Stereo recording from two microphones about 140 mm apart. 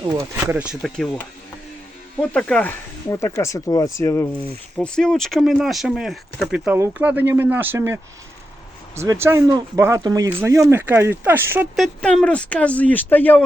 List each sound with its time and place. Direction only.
0.1 s speech: 20° right (ahead or behind)
0.8 s speech: 5° left (ahead or behind)
4.8 s speech: 5° left (ahead or behind); by 7.9 s 15° right (ahead or behind)
9.0 s speech: 20° right (ahead or behind)
11.8 s speech: 5° left (ahead or behind)